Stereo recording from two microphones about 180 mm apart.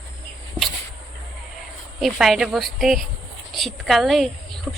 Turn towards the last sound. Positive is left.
turn(degrees=5)  # may be behind; listen again after turning